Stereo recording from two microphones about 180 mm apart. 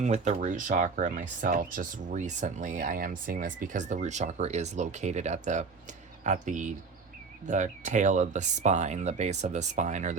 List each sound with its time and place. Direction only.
0.0 s speech: 40° right (ahead or behind)